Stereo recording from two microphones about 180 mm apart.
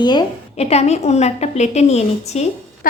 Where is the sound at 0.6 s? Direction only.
35° left (ahead or behind).